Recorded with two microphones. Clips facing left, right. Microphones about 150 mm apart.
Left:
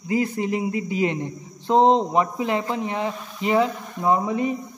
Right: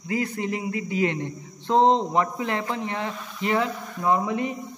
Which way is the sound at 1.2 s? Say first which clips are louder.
Left 1 dB; 10° left (ahead or behind).